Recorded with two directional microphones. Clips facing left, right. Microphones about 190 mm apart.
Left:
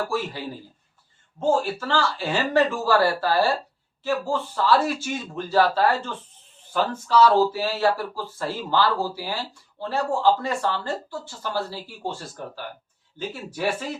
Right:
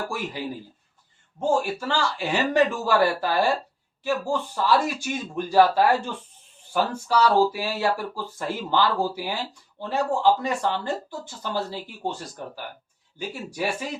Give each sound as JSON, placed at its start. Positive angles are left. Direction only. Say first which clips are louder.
{"t": 1.4, "sound": "speech", "louder": "left 1 dB", "side_deg": -15}